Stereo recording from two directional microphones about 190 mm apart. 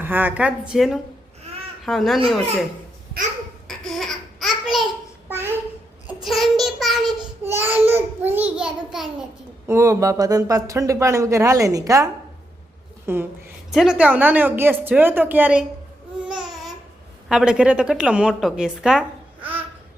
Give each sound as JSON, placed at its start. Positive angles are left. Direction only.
{"t": 0.0, "sound": "speech", "side_deg": -10}
{"t": 3.7, "sound": "laughter", "side_deg": 0}
{"t": 6.2, "sound": "child singing", "side_deg": 0}
{"t": 7.4, "sound": "babbling", "side_deg": -10}
{"t": 7.9, "sound": "speech", "side_deg": -10}
{"t": 9.6, "sound": "speech", "side_deg": -15}
{"t": 16.3, "sound": "babbling", "side_deg": 0}
{"t": 17.2, "sound": "a woman's voice", "side_deg": -5}